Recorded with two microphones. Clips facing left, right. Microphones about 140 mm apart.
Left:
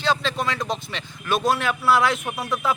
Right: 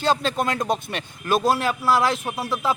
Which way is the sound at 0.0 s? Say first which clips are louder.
Right 2 dB; 45° right (ahead or behind).